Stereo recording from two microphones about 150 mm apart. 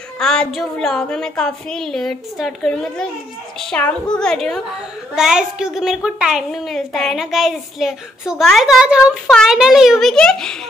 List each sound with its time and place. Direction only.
0.2 s a woman's voice: 5° left (ahead or behind)